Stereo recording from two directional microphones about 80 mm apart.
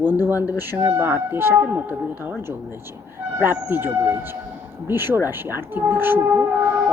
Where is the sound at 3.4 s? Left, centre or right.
Right.